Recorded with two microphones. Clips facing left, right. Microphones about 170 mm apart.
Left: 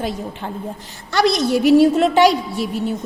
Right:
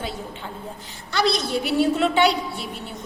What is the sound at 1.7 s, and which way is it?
Speech, 40° left (ahead or behind).